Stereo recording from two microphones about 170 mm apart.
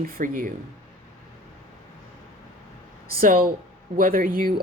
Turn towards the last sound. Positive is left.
turn(degrees=-55)  # may be behind; listen again after turning